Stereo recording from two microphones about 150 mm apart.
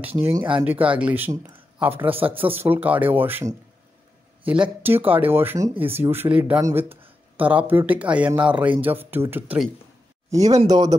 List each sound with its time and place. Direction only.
0.2 s speech: 15° right (ahead or behind)
10.3 s speech: 25° right (ahead or behind)